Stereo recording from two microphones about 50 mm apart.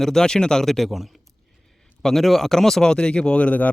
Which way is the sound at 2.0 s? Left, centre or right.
Centre.